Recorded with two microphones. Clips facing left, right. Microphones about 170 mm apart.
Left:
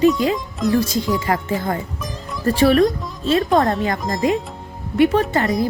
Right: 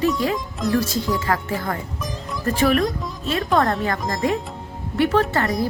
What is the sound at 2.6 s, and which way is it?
Speech, 35° left (ahead or behind).